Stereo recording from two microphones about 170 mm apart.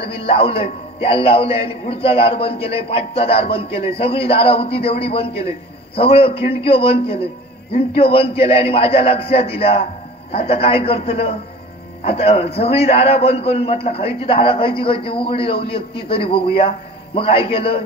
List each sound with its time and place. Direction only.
0.0 s a man's voice: 35° left (ahead or behind)